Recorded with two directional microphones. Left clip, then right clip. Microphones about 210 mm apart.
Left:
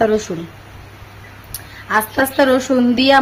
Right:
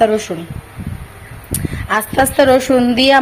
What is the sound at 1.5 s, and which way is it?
A woman's voice, 15° right (ahead or behind).